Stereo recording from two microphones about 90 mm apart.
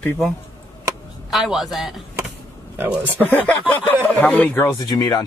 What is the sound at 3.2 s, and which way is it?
Speech, 15° left (ahead or behind).